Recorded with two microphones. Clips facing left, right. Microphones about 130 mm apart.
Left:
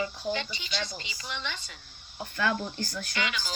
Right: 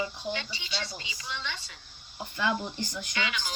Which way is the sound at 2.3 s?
20° right (ahead or behind).